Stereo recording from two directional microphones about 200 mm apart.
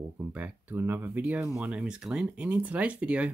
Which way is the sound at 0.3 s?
10° right (ahead or behind).